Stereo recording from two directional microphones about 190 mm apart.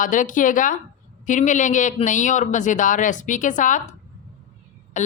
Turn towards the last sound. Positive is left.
turn(degrees=40)  # may be behind; listen again after turning